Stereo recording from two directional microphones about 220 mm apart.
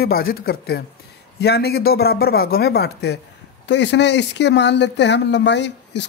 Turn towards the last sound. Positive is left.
turn(degrees=50)  # may be behind; listen again after turning